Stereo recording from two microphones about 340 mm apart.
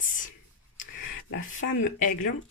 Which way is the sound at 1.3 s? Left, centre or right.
Left.